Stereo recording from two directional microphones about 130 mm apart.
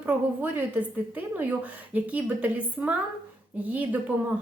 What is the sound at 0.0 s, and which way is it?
A woman's voice, 15° right (ahead or behind).